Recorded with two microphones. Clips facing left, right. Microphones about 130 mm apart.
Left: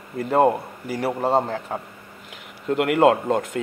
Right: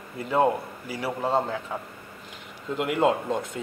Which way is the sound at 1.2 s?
30° left (ahead or behind).